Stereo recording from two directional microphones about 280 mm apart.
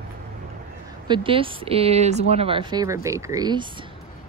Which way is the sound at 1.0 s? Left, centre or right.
Centre.